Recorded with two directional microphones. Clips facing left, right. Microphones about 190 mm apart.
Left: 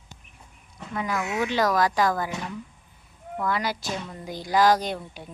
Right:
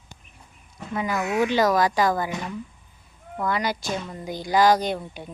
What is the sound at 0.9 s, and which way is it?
Speech, 5° right (ahead or behind).